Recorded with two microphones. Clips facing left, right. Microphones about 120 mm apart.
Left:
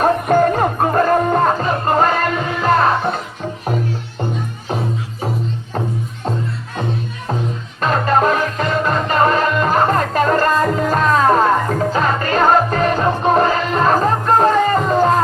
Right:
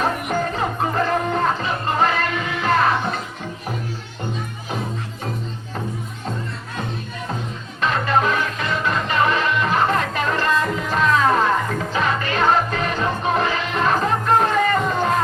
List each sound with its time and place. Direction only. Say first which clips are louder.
0.0 s music: left 8 dB; 50° left (ahead or behind)
7.8 s music: left 4 dB; 40° left (ahead or behind)